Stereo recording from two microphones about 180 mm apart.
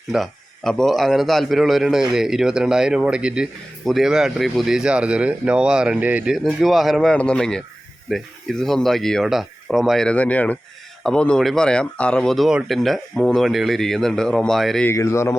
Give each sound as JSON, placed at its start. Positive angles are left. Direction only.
{"t": 0.1, "sound": "a man's voice", "side_deg": 0}
{"t": 14.8, "sound": "speech", "side_deg": 15}